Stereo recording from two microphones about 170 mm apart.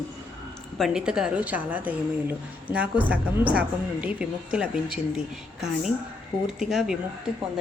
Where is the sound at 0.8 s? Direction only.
5° right (ahead or behind).